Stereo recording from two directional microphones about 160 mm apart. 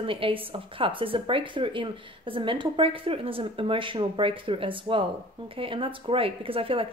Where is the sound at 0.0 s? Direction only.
35° right (ahead or behind).